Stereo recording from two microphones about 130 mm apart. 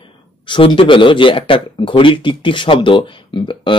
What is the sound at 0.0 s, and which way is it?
Speech, 40° left (ahead or behind).